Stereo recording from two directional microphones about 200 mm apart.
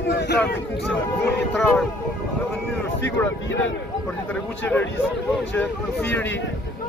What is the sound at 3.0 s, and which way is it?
Speech, 15° left (ahead or behind).